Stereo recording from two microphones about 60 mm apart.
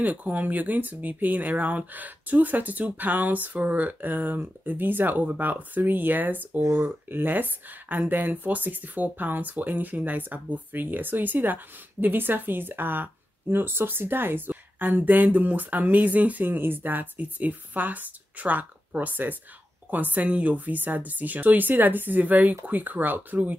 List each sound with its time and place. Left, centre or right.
0.0 s speech: right
6.6 s speech: right
7.1 s speech: right